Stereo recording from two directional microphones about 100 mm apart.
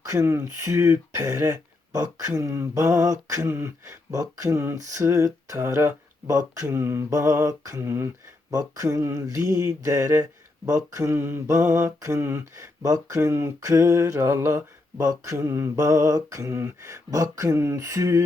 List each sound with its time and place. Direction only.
0.0 s mantra: 30° right (ahead or behind)